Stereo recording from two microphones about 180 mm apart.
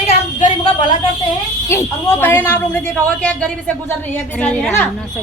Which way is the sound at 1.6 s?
15° left (ahead or behind).